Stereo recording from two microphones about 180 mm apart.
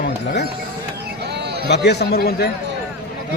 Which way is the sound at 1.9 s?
60° left (ahead or behind).